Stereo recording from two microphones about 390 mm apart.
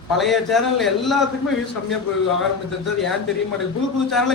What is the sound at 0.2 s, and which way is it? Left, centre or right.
A man's voice, centre.